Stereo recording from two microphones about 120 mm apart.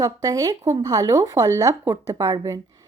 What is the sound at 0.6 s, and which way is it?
Speech, 70° right (ahead or behind).